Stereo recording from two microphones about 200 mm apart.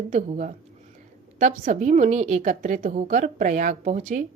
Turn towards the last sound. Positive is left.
turn(degrees=-35)  # may be behind; listen again after turning